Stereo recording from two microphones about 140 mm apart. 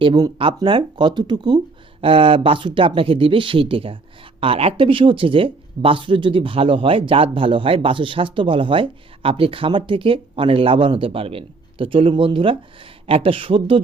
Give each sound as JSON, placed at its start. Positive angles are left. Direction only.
{"t": 0.0, "sound": "speech", "side_deg": -35}